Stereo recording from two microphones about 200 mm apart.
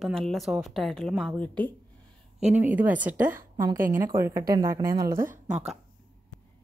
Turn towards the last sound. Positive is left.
turn(degrees=-5)  # may be behind; listen again after turning